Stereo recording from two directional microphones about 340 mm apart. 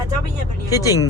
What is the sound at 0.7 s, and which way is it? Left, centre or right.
Speech, centre.